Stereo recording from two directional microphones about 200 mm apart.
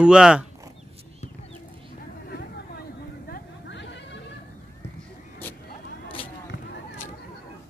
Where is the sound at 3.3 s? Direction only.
60° left (ahead or behind).